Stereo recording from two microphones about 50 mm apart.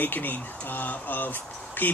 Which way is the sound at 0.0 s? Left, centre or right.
Left.